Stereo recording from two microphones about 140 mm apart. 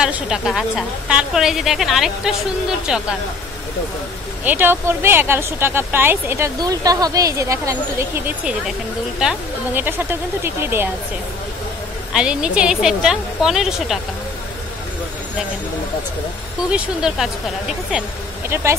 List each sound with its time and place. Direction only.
0.0 s a woman's voice: 5° right (ahead or behind)
4.5 s a woman's voice: 15° right (ahead or behind)
9.8 s a woman's voice: 15° right (ahead or behind)
12.1 s a woman's voice: 5° right (ahead or behind)
16.7 s a woman's voice: 5° right (ahead or behind)
18.5 s speech: 20° right (ahead or behind)